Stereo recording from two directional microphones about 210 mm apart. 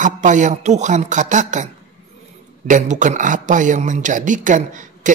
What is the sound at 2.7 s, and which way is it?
A woman's voice, 35° right (ahead or behind).